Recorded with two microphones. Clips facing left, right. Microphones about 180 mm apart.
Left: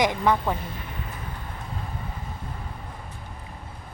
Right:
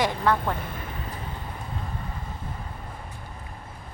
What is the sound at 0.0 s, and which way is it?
Speech, 15° left (ahead or behind).